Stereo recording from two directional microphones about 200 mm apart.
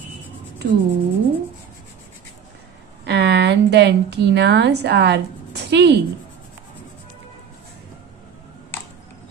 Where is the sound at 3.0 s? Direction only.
55° right (ahead or behind).